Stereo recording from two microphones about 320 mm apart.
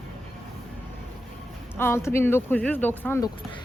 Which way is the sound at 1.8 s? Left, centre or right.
Centre.